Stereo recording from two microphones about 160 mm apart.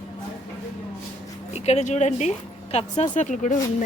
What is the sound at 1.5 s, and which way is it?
A woman's voice, 45° left (ahead or behind).